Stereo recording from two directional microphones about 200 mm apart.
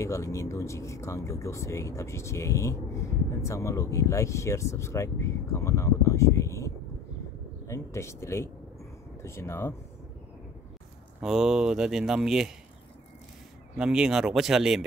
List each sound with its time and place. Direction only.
0.0 s speech: 15° left (ahead or behind)
11.1 s speech: centre (ahead or behind)
13.7 s speech: 5° right (ahead or behind)